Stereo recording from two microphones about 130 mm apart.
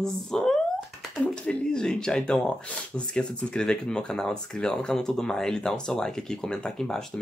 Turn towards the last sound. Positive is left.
turn(degrees=5)  # may be behind; listen again after turning